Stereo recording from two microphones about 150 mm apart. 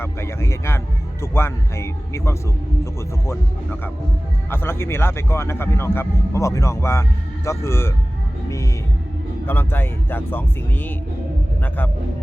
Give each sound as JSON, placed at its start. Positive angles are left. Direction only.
{"t": 0.0, "sound": "speech", "side_deg": 15}
{"t": 8.4, "sound": "music", "side_deg": 20}
{"t": 9.5, "sound": "speech", "side_deg": 15}